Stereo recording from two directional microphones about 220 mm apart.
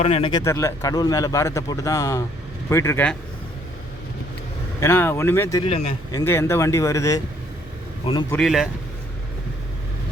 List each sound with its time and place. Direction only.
0.0 s a man's voice: 25° left (ahead or behind); by 3.2 s 10° left (ahead or behind)
4.8 s a man's voice: 10° left (ahead or behind)
5.6 s speech: 30° left (ahead or behind)
6.1 s a man's voice: 15° left (ahead or behind)
8.3 s speech: centre (ahead or behind)